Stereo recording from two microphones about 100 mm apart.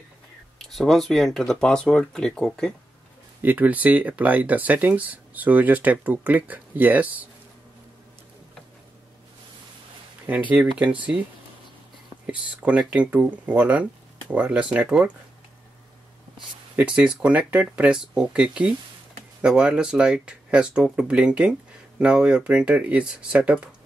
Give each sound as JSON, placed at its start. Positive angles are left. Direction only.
{"t": 0.6, "sound": "speech", "side_deg": 0}
{"t": 3.4, "sound": "speech", "side_deg": -15}
{"t": 10.2, "sound": "speech", "side_deg": -15}
{"t": 12.3, "sound": "speech", "side_deg": -10}
{"t": 16.7, "sound": "speech", "side_deg": -15}